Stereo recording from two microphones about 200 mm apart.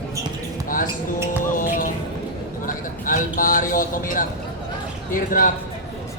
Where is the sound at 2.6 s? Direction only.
45° left (ahead or behind).